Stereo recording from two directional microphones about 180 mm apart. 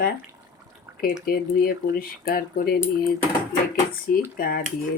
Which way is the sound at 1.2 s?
55° left (ahead or behind).